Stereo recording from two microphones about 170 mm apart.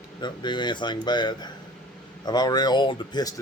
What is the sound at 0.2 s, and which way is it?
Speech, 25° left (ahead or behind).